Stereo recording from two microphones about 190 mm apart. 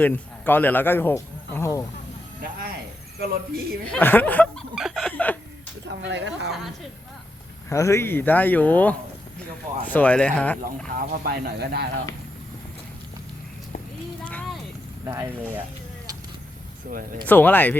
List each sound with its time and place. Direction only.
0.0 s speech: 10° left (ahead or behind)
3.2 s speech: 55° right (ahead or behind)
3.8 s speech: 10° left (ahead or behind)
4.7 s chicken: centre (ahead or behind)
6.1 s a woman's voice: 70° right (ahead or behind)
7.7 s speech: 15° left (ahead or behind)
10.8 s speech: 50° right (ahead or behind)
14.3 s a sound: 5° left (ahead or behind)
15.0 s speech: 15° right (ahead or behind)
17.2 s speech: 10° left (ahead or behind)